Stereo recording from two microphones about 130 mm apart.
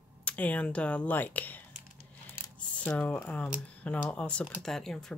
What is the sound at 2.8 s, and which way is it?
Speech, 10° left (ahead or behind).